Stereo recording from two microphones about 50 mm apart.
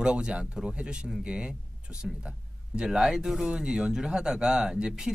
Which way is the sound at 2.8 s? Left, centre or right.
Centre.